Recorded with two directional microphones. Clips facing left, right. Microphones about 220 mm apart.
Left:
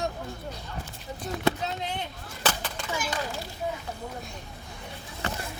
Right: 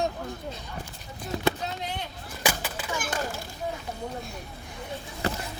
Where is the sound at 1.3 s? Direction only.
25° right (ahead or behind).